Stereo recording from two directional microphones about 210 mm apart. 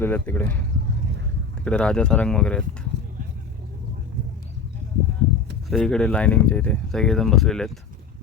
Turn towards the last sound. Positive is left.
turn(degrees=0)  # may be behind; listen again after turning